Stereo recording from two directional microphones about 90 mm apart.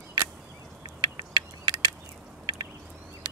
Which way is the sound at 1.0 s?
50° right (ahead or behind).